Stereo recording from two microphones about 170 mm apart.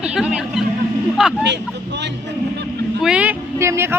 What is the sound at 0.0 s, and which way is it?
Speech, 5° right (ahead or behind).